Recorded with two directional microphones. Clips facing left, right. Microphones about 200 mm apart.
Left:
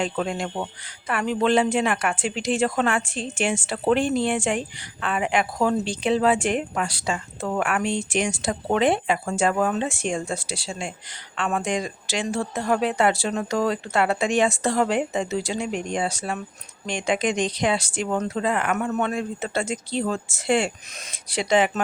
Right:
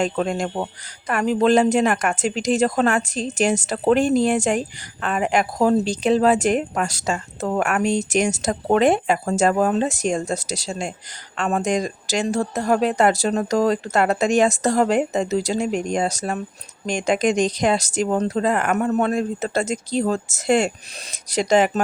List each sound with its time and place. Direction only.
0.0 s speech: 45° right (ahead or behind)